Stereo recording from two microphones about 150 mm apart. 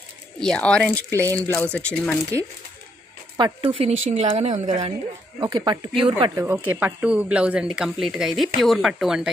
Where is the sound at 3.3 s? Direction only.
30° right (ahead or behind).